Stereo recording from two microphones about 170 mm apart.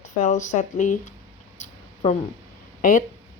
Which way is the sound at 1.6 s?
45° left (ahead or behind).